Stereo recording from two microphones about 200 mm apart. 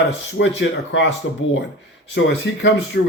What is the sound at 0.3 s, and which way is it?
Speech, 60° left (ahead or behind).